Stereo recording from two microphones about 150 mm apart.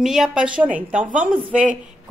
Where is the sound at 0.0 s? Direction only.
5° right (ahead or behind).